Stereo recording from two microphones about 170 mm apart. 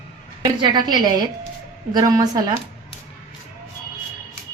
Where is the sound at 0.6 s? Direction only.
25° right (ahead or behind).